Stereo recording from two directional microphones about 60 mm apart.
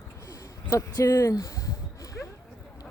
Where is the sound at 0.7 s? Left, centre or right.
Left.